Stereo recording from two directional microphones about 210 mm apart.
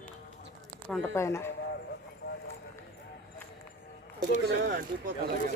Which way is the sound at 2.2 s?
50° left (ahead or behind).